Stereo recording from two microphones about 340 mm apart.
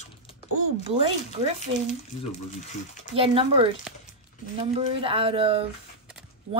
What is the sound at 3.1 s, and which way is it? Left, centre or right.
A woman's voice, centre.